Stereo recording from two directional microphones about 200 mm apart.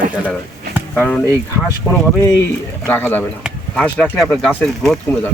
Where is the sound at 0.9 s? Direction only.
5° left (ahead or behind).